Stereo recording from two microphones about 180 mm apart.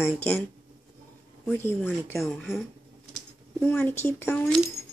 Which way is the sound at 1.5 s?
10° left (ahead or behind).